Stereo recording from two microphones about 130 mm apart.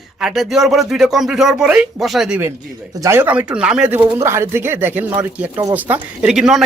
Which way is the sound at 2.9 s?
20° right (ahead or behind).